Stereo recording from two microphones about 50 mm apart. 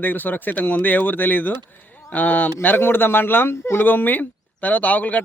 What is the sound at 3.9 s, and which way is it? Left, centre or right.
Speech, left.